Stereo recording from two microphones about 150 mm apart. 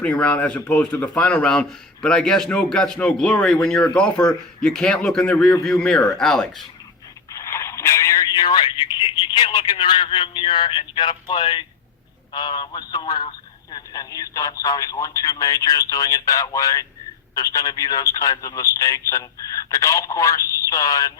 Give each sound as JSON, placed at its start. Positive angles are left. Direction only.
{"t": 0.0, "sound": "a man's voice", "side_deg": 10}
{"t": 7.3, "sound": "speech", "side_deg": 20}